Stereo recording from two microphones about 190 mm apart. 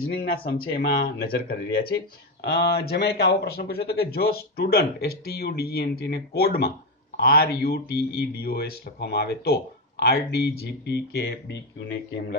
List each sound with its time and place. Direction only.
0.0 s speech: 55° left (ahead or behind)